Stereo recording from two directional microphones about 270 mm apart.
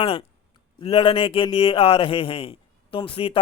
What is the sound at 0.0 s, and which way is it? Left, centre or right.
A man's voice, left.